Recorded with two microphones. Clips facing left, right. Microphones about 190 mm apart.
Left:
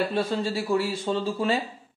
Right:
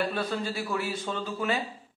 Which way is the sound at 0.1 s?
25° left (ahead or behind).